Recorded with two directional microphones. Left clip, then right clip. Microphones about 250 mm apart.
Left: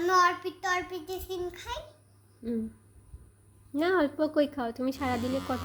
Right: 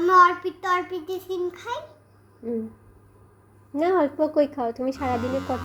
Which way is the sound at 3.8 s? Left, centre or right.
Left.